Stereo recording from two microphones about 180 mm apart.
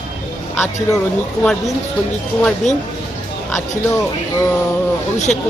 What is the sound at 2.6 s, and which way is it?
Speech, 40° left (ahead or behind).